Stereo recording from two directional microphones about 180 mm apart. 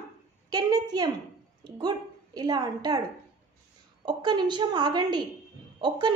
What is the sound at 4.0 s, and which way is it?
A woman's voice, 25° right (ahead or behind).